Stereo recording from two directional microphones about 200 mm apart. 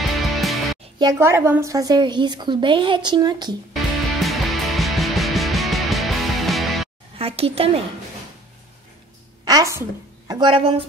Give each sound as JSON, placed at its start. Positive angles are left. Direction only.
{"t": 0.1, "sound": "music", "side_deg": 0}
{"t": 0.9, "sound": "a woman's voice", "side_deg": -15}
{"t": 3.7, "sound": "music", "side_deg": 0}
{"t": 7.2, "sound": "a woman's voice", "side_deg": -30}
{"t": 9.4, "sound": "a woman's voice", "side_deg": -20}